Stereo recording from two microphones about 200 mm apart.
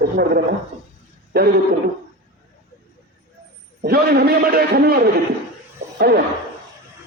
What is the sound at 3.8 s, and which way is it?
A man's voice, 50° right (ahead or behind).